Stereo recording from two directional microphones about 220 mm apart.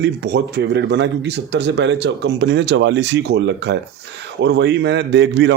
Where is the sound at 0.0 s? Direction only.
50° right (ahead or behind).